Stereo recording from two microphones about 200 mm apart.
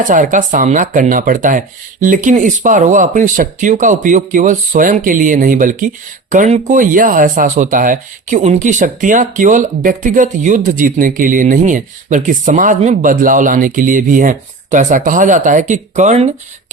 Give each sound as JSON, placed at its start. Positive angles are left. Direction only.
{"t": 0.1, "sound": "speech", "side_deg": -40}